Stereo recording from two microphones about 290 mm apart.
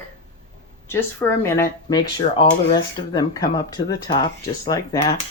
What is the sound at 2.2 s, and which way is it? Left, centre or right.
Speech, left.